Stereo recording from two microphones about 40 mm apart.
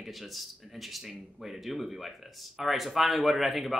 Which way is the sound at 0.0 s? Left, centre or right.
Centre.